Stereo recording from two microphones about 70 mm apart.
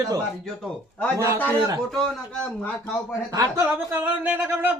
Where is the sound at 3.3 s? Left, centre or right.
Right.